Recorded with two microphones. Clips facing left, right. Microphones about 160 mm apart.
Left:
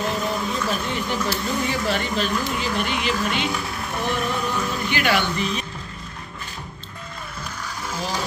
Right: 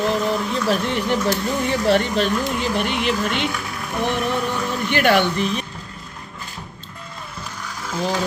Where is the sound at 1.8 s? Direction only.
65° right (ahead or behind).